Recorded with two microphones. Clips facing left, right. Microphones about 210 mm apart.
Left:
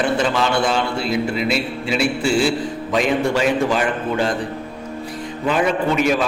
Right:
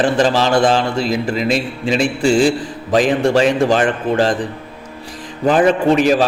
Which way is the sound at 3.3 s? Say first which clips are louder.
Right 5 dB; 30° right (ahead or behind).